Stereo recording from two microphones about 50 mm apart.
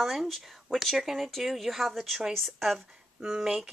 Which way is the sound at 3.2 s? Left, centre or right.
Centre.